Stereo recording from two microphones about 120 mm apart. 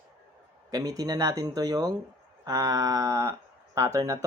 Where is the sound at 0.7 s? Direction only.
30° right (ahead or behind).